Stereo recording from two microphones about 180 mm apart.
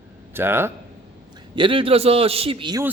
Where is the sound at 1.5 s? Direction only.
30° right (ahead or behind).